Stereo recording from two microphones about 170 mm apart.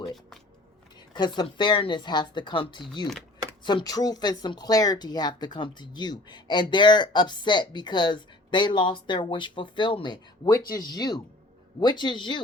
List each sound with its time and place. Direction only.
1.1 s speech: 25° left (ahead or behind)